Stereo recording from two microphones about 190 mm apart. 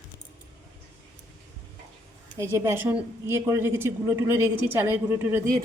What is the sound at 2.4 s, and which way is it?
A woman's voice, 15° right (ahead or behind).